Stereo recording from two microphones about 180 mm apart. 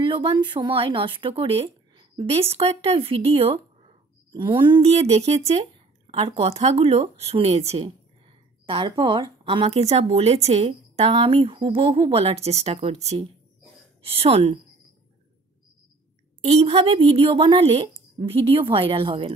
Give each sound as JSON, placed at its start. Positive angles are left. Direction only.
{"t": 0.0, "sound": "speech", "side_deg": -30}
{"t": 16.4, "sound": "speech", "side_deg": -35}